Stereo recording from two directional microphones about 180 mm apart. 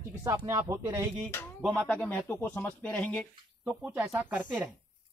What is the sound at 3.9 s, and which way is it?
Speech, 10° right (ahead or behind).